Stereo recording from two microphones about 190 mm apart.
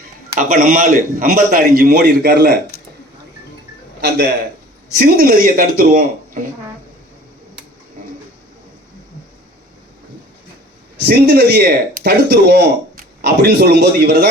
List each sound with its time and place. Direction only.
0.3 s a man's voice: 45° right (ahead or behind)
4.9 s a man's voice: 50° right (ahead or behind)
11.0 s speech: 55° right (ahead or behind)